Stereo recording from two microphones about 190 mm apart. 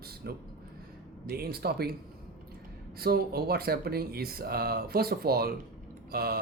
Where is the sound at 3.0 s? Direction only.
55° right (ahead or behind).